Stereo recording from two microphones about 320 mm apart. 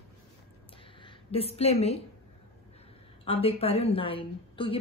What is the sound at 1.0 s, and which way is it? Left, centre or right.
Speech, centre.